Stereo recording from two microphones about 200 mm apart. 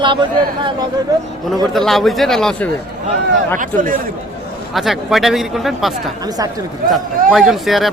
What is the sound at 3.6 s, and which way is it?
Speech, 40° right (ahead or behind).